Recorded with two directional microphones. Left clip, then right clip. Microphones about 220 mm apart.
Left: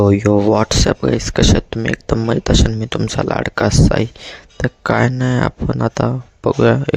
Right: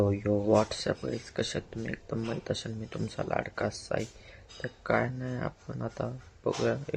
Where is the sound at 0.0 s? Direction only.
45° left (ahead or behind).